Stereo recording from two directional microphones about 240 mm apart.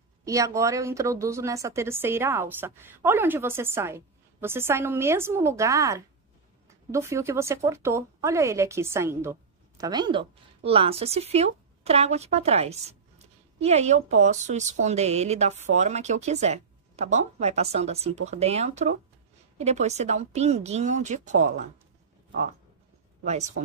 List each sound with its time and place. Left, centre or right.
0.2 s a woman's voice: centre; by 21.6 s right
23.2 s a woman's voice: right